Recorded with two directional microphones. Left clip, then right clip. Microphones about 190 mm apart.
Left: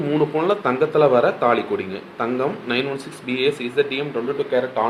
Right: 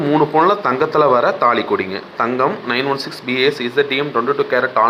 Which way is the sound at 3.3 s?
45° right (ahead or behind).